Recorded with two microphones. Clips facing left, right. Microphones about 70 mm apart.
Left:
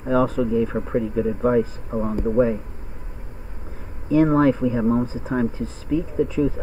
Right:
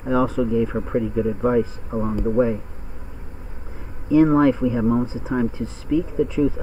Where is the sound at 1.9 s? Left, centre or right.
Right.